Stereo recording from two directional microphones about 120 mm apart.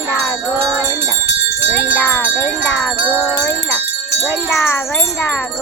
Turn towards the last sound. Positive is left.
turn(degrees=20)  # may be behind; listen again after turning